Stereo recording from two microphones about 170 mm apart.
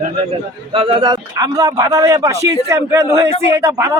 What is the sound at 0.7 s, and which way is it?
A man's voice, 30° right (ahead or behind).